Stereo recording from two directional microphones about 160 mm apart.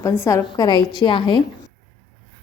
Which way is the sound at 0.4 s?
25° left (ahead or behind).